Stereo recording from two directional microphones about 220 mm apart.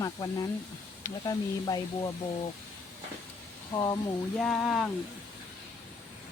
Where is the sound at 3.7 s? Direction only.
10° left (ahead or behind).